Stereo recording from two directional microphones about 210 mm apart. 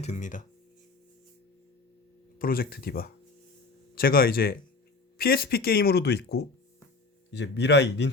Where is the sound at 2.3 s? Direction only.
45° left (ahead or behind).